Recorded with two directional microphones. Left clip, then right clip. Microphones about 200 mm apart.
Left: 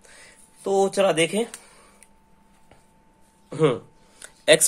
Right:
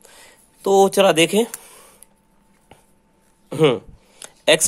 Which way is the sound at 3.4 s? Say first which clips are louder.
Right 5 dB; 30° right (ahead or behind).